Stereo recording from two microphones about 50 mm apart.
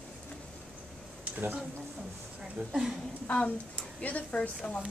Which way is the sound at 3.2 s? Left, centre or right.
Left.